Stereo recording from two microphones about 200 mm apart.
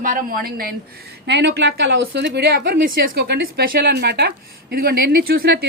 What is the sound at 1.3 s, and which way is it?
Speech, 60° right (ahead or behind).